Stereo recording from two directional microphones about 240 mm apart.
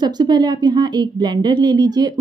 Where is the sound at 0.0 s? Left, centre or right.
Centre.